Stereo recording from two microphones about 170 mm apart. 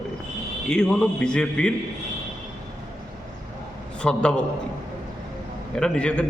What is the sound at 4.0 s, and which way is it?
Speech, 5° left (ahead or behind).